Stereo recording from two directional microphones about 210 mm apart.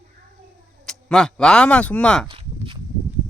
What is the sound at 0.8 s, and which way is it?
Speech, 5° left (ahead or behind).